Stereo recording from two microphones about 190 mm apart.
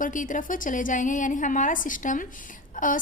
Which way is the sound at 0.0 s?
45° left (ahead or behind).